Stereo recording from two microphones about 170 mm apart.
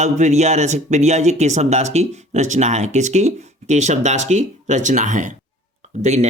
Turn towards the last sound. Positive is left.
turn(degrees=-40)  # may be behind; listen again after turning